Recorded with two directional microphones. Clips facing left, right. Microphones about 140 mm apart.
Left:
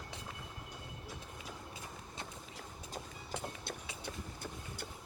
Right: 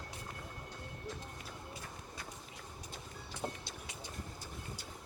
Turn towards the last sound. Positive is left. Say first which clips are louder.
# left 3 dB
turn(degrees=60)  # may be behind; listen again after turning